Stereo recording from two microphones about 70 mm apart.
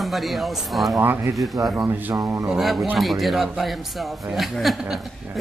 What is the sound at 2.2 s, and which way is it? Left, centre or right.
Speech, right.